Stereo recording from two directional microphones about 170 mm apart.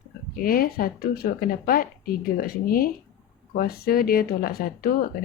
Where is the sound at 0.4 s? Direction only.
60° left (ahead or behind).